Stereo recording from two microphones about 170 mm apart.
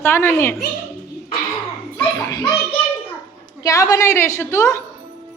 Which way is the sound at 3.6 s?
20° left (ahead or behind).